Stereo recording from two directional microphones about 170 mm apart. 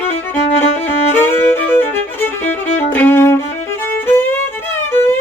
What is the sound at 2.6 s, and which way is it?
Music, 40° left (ahead or behind).